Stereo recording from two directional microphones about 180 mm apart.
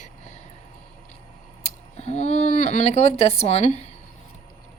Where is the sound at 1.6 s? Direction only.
35° left (ahead or behind).